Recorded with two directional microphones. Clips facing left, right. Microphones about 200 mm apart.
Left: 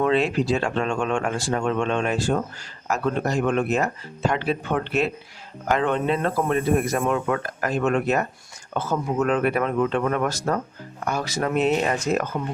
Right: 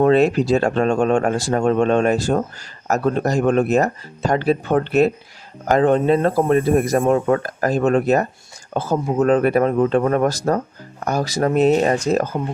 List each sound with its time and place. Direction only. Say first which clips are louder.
0.0 s speech: right 6 dB; 45° right (ahead or behind)